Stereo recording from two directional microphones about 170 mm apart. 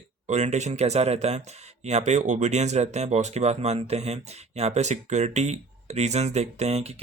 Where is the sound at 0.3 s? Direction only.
40° right (ahead or behind).